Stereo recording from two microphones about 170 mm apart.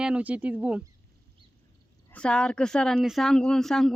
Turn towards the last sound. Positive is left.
turn(degrees=0)  # may be behind; listen again after turning